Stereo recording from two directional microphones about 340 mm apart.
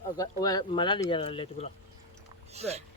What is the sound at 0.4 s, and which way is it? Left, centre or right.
Speech, centre.